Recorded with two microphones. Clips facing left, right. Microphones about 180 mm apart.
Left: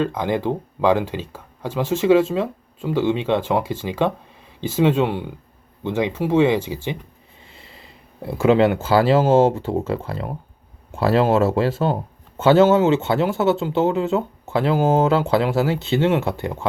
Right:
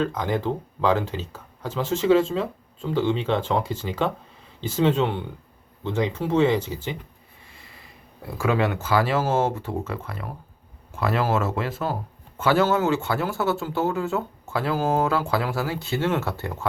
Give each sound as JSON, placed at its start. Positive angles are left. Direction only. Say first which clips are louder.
{"t": 0.0, "sound": "speech", "louder": "left 3 dB", "side_deg": 15}
{"t": 7.4, "sound": "speech", "louder": "left 4 dB", "side_deg": 25}